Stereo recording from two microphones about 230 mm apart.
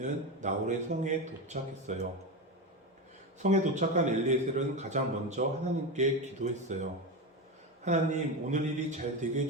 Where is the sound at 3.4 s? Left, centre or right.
Right.